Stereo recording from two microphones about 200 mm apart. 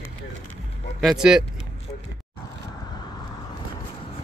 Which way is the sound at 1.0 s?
5° right (ahead or behind).